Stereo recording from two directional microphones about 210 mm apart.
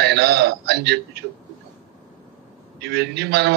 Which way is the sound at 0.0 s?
50° right (ahead or behind).